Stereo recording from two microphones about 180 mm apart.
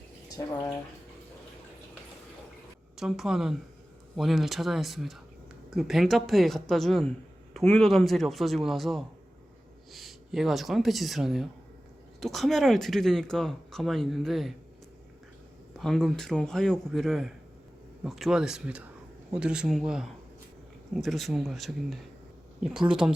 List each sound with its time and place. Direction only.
0.4 s speech: 15° left (ahead or behind)
3.0 s speech: centre (ahead or behind)
15.8 s speech: centre (ahead or behind)